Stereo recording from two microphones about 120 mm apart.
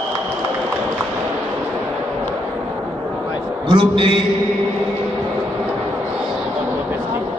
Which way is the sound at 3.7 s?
45° right (ahead or behind).